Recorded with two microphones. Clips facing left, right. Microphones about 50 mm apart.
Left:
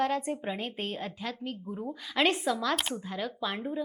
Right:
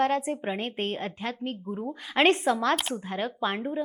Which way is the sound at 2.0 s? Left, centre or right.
Right.